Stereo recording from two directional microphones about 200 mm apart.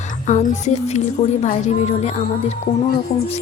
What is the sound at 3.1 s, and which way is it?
Speech, 45° left (ahead or behind).